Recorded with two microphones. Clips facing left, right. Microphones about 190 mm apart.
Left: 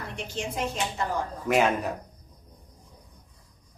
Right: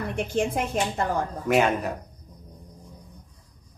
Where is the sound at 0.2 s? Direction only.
55° right (ahead or behind).